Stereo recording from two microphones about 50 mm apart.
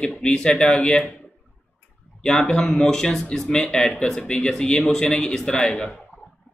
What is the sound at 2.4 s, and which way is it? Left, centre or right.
A man's voice, centre.